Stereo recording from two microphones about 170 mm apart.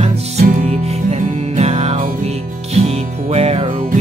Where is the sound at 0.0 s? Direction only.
45° right (ahead or behind).